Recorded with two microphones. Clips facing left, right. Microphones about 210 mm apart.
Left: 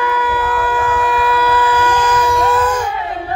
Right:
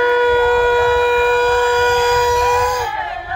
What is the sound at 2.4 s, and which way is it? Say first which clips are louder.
Baby cry: left 1 dB; 10° right (ahead or behind).